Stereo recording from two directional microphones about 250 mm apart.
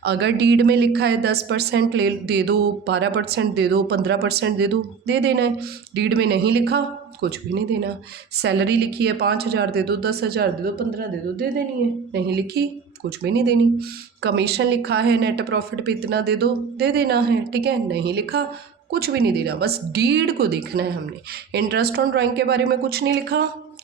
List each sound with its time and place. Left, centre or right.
0.0 s a woman's voice: right
12.6 s a woman's voice: right